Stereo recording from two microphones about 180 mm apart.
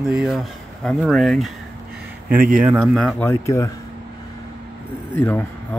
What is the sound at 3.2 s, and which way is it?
Speech, 15° left (ahead or behind).